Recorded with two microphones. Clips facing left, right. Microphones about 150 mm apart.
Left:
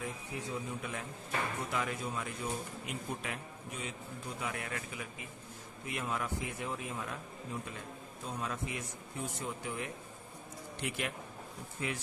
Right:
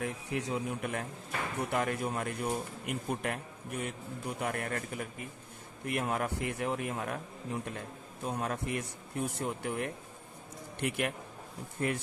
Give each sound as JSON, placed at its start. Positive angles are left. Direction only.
{"t": 0.0, "sound": "a man's voice", "side_deg": -75}
{"t": 5.9, "sound": "a man's voice", "side_deg": -60}
{"t": 8.3, "sound": "a man's voice", "side_deg": -60}